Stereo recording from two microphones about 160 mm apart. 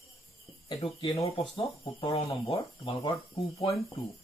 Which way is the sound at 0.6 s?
30° left (ahead or behind).